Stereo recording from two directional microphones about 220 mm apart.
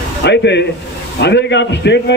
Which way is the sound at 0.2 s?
50° left (ahead or behind).